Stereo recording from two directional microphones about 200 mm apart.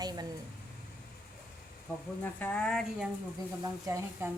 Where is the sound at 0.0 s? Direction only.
20° right (ahead or behind).